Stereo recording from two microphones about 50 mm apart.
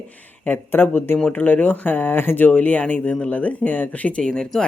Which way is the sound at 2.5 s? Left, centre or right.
Left.